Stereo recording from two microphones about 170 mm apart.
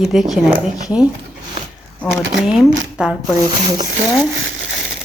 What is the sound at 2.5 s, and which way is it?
Speech, 5° right (ahead or behind).